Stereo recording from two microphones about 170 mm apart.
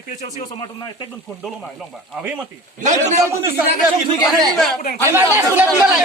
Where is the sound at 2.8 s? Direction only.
45° right (ahead or behind).